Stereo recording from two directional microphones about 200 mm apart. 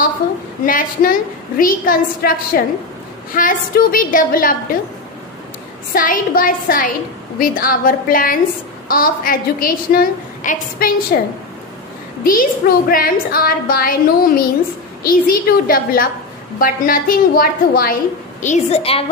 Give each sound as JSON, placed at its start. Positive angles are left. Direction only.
{"t": 0.7, "sound": "a woman's voice", "side_deg": 45}
{"t": 5.9, "sound": "a woman's voice", "side_deg": 45}
{"t": 18.4, "sound": "a woman's voice", "side_deg": 35}